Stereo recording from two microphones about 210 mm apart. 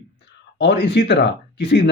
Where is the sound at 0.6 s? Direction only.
55° left (ahead or behind).